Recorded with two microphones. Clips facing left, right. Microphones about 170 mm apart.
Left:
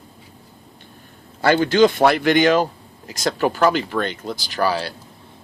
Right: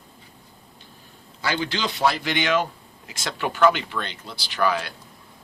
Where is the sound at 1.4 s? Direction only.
50° left (ahead or behind).